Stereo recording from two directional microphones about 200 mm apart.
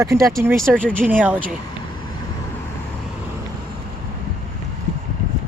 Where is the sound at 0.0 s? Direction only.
15° right (ahead or behind).